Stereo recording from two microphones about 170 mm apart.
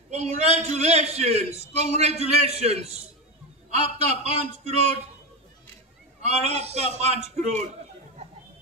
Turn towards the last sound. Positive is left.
turn(degrees=-40)  # may be behind; listen again after turning